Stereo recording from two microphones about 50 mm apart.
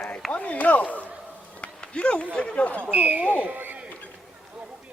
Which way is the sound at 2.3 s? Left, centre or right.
Left.